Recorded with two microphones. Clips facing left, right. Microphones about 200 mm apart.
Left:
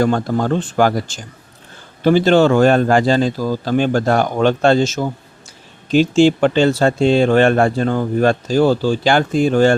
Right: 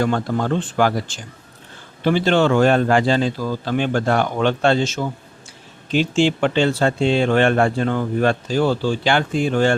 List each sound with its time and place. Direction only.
0.0 s speech: 40° left (ahead or behind)